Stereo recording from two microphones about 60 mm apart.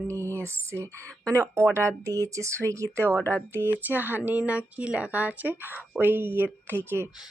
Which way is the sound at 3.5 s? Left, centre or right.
Right.